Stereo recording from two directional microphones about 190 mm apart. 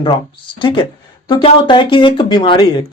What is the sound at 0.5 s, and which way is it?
Speech, 25° left (ahead or behind).